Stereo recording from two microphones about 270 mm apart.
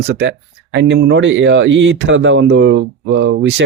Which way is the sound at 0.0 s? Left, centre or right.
Right.